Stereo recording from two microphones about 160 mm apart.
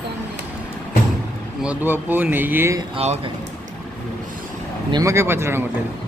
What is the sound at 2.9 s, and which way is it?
Speech, 40° right (ahead or behind).